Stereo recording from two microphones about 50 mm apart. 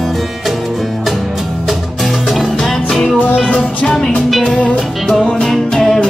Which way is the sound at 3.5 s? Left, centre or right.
Left.